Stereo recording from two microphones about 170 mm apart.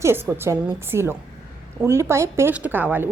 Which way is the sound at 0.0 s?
15° right (ahead or behind).